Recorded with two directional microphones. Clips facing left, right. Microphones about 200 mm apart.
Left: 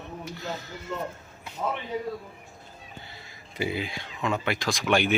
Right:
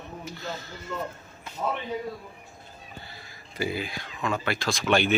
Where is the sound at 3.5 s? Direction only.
20° left (ahead or behind).